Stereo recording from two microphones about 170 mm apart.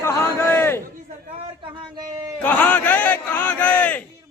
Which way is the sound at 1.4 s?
30° right (ahead or behind).